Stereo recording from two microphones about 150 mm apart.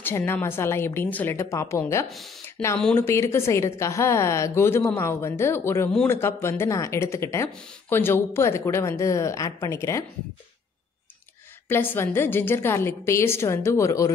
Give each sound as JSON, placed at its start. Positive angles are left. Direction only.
{"t": 0.0, "sound": "a woman's voice", "side_deg": 15}
{"t": 2.8, "sound": "a woman's voice", "side_deg": 10}
{"t": 11.7, "sound": "a woman's voice", "side_deg": 15}